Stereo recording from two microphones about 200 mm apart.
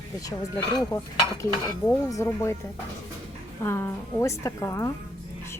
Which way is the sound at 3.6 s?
10° left (ahead or behind).